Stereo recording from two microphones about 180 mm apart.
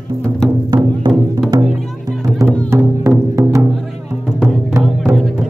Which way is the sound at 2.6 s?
15° right (ahead or behind).